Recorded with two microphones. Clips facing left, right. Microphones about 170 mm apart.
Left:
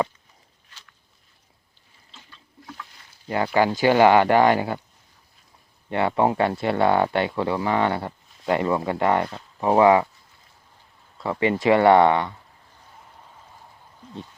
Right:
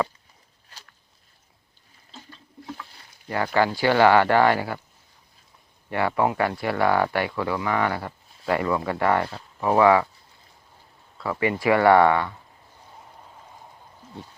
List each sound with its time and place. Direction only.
0.7 s a sound: 40° right (ahead or behind)
2.1 s water: 40° right (ahead or behind)
3.2 s speech: 20° left (ahead or behind)
5.9 s speech: 25° left (ahead or behind)
11.2 s speech: 25° left (ahead or behind)